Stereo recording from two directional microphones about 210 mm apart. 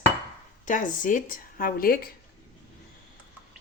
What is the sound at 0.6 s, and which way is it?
Speech, 40° left (ahead or behind).